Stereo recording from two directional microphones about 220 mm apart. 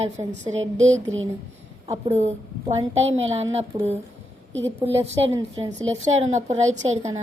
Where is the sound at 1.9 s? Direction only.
30° right (ahead or behind).